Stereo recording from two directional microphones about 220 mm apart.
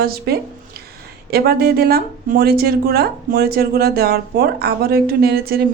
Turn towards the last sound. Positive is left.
turn(degrees=-45)  # may be behind; listen again after turning